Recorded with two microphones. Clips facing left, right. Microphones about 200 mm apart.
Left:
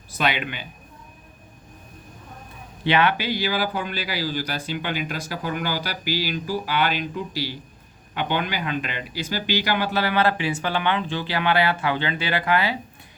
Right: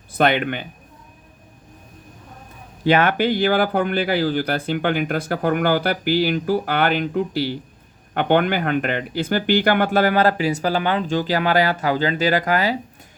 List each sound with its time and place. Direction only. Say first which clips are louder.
0.1 s speech: right 7 dB; 55° right (ahead or behind)
2.8 s speech: right 4 dB; 45° right (ahead or behind)